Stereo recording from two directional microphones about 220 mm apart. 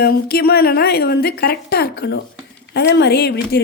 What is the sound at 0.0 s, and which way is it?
A woman's voice, 45° left (ahead or behind).